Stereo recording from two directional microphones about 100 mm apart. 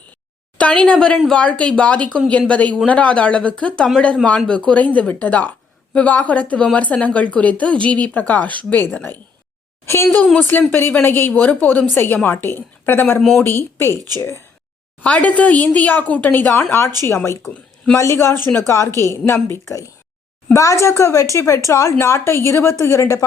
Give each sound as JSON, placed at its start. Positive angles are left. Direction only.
{"t": 0.9, "sound": "a woman's voice", "side_deg": 10}
{"t": 9.9, "sound": "a woman's voice", "side_deg": 25}
{"t": 15.0, "sound": "a woman's voice", "side_deg": 15}
{"t": 17.4, "sound": "speech", "side_deg": 10}
{"t": 17.9, "sound": "a woman's voice", "side_deg": 30}